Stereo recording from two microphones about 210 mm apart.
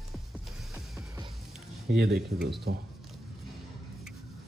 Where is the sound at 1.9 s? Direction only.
50° right (ahead or behind).